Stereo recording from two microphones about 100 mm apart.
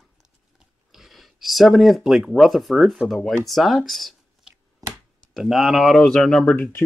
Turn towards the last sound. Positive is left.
turn(degrees=20)  # may be behind; listen again after turning